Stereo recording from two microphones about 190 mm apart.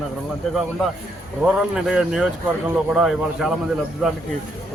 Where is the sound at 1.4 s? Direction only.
5° right (ahead or behind).